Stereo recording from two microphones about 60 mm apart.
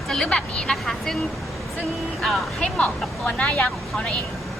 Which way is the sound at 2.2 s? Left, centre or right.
Centre.